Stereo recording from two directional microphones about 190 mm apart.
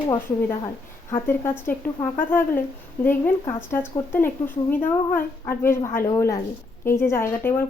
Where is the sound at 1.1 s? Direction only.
10° left (ahead or behind).